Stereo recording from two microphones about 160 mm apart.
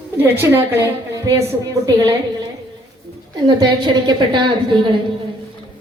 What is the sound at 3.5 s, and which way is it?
Speech, 30° right (ahead or behind).